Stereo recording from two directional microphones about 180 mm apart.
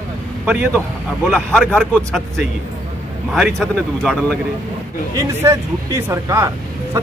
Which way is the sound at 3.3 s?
Centre (ahead or behind).